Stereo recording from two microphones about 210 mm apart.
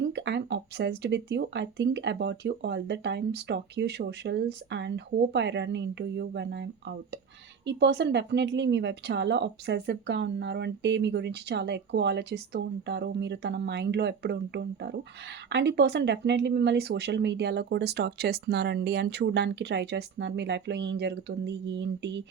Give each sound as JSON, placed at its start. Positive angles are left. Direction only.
{"t": 0.1, "sound": "speech", "side_deg": -55}